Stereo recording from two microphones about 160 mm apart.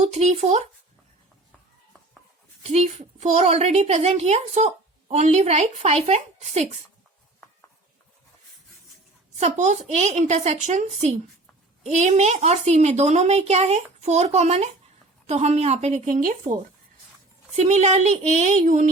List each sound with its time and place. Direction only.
0.0 s a woman's voice: 45° right (ahead or behind)
2.6 s a woman's voice: 45° right (ahead or behind)
9.4 s a woman's voice: 45° right (ahead or behind)
17.5 s a woman's voice: 45° right (ahead or behind)